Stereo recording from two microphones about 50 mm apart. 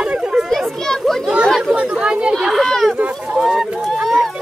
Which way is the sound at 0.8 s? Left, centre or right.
Centre.